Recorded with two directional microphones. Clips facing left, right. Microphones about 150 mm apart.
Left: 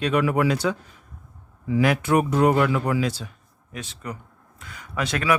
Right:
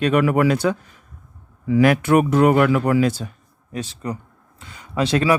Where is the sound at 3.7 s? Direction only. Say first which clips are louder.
Right 7 dB; 35° right (ahead or behind).